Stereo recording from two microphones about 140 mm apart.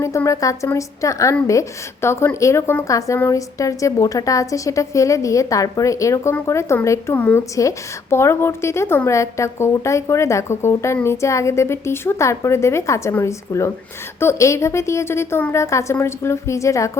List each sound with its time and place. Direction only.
0.0 s a woman's voice: 20° left (ahead or behind)
7.5 s a woman's voice: 20° left (ahead or behind)